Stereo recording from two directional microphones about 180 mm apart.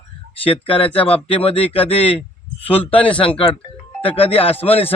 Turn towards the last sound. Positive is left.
turn(degrees=30)  # may be behind; listen again after turning